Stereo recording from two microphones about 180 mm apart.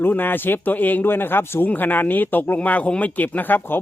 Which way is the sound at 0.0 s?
10° left (ahead or behind).